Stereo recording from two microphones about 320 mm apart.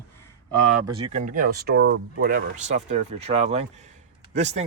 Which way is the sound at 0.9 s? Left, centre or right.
Right.